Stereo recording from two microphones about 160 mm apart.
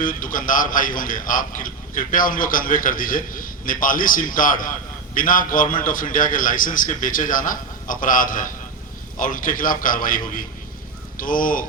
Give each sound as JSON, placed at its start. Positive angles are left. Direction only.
{"t": 0.0, "sound": "a man's voice", "side_deg": 60}